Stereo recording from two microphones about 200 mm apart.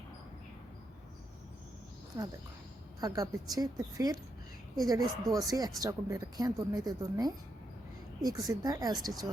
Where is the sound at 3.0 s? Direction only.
20° right (ahead or behind).